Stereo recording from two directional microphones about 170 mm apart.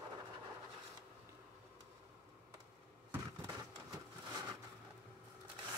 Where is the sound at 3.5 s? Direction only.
25° right (ahead or behind).